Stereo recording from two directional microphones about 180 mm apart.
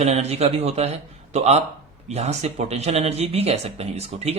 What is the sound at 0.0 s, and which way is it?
Speech, 35° right (ahead or behind).